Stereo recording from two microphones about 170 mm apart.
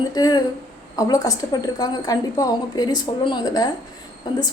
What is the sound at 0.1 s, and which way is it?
A woman's voice, 25° left (ahead or behind).